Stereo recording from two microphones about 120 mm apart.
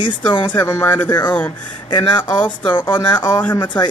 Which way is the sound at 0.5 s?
20° left (ahead or behind).